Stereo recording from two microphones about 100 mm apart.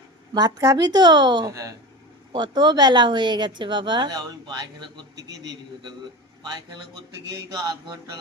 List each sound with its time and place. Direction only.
0.3 s speech: 40° right (ahead or behind)
7.6 s mantra: 40° right (ahead or behind)